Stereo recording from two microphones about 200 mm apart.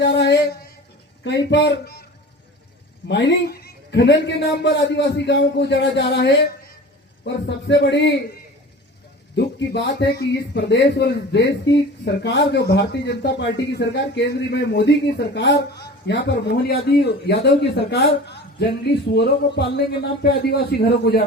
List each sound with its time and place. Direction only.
0.0 s a man's voice: 60° left (ahead or behind)
3.1 s a man's voice: 60° left (ahead or behind)
9.3 s a man's voice: 60° left (ahead or behind)